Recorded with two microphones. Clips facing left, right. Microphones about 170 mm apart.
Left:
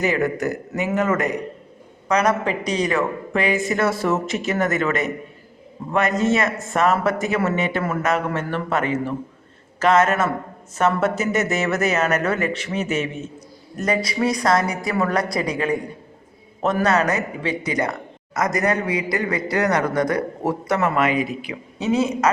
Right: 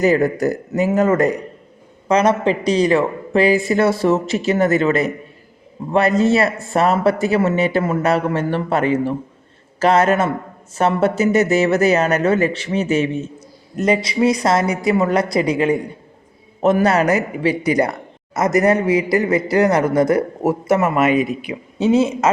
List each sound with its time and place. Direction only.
0.0 s a woman's voice: 35° right (ahead or behind)
16.8 s a woman's voice: 30° right (ahead or behind)